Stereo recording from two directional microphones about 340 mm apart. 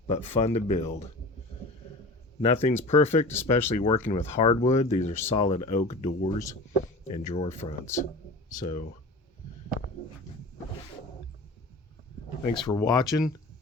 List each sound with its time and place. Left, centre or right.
0.1 s speech: centre
2.4 s speech: centre
12.5 s speech: centre